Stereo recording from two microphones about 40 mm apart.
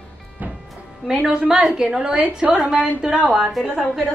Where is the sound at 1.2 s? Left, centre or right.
Right.